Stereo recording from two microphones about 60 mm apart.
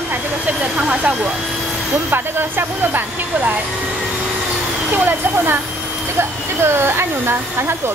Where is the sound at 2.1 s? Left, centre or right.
Right.